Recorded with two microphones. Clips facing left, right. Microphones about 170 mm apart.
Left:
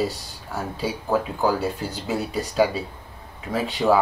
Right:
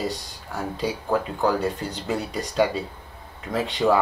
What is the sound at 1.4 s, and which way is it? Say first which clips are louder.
Speech: even; 5° left (ahead or behind).